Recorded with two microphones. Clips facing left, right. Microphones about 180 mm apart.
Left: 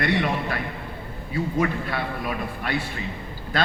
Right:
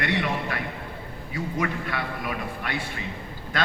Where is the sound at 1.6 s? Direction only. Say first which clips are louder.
Left 2 dB; 30° left (ahead or behind).